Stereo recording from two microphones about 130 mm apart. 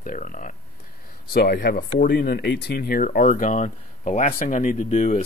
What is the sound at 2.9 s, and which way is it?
Speech, 90° left.